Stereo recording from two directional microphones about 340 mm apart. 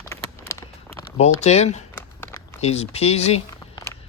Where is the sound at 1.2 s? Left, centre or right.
Centre.